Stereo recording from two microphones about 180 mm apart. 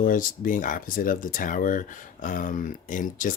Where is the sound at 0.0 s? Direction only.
50° left (ahead or behind).